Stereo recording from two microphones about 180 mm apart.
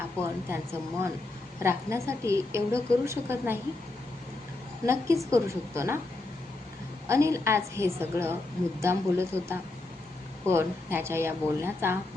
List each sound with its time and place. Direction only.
0.5 s a woman's voice: 15° right (ahead or behind)
4.9 s a woman's voice: 15° right (ahead or behind)
7.1 s a woman's voice: 15° right (ahead or behind)